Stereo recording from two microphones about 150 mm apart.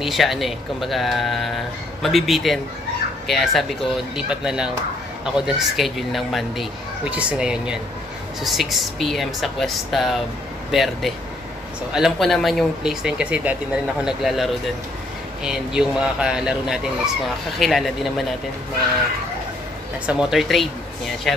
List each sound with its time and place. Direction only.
0.0 s speech: centre (ahead or behind)
20.1 s speech: 5° right (ahead or behind)